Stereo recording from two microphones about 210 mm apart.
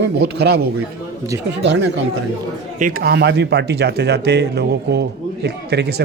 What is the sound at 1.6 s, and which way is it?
Speech, 55° right (ahead or behind).